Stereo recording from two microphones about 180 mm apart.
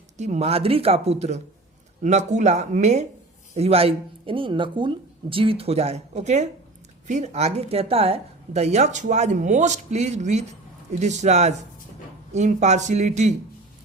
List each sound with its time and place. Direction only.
0.2 s speech: 35° right (ahead or behind)